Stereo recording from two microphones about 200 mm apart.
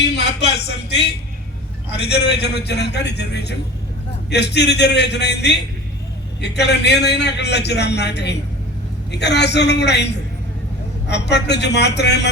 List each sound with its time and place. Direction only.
0.0 s a sound: 55° left (ahead or behind)
1.9 s a man's voice: 55° left (ahead or behind)
11.1 s a man's voice: 60° left (ahead or behind)